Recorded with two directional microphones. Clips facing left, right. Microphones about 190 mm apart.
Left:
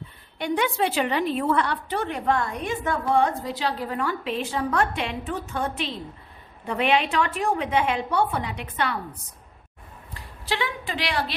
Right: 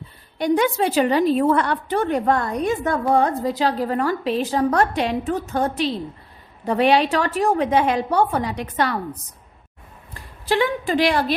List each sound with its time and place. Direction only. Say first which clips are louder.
0.3 s a woman's voice: right 6 dB; 40° right (ahead or behind)
10.2 s a woman's voice: right 8 dB; 45° right (ahead or behind)